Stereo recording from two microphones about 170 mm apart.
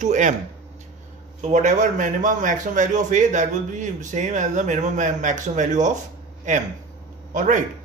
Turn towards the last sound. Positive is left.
turn(degrees=-45)  # may be behind; listen again after turning